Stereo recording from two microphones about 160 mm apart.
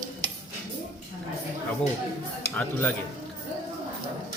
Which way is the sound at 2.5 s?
10° left (ahead or behind).